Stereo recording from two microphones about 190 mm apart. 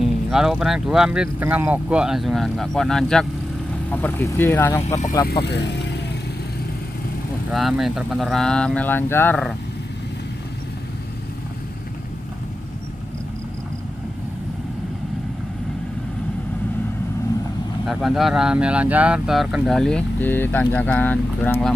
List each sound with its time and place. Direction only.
0.0 s speech: centre (ahead or behind)
5.3 s speech: 65° left (ahead or behind)
7.5 s speech: centre (ahead or behind)
17.8 s speech: centre (ahead or behind)